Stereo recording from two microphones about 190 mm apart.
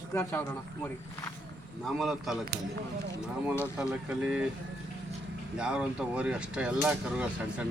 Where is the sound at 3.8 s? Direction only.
5° right (ahead or behind).